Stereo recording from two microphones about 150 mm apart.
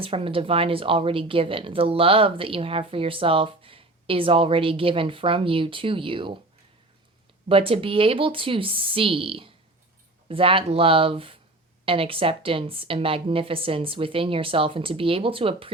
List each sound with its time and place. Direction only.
0.0 s a woman's voice: 40° right (ahead or behind)
7.4 s a woman's voice: 40° right (ahead or behind)